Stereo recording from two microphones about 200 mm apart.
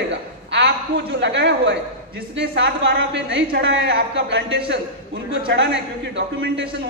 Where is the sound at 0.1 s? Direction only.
60° right (ahead or behind).